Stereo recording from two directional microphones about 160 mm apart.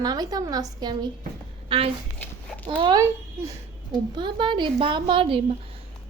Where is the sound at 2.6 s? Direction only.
30° right (ahead or behind).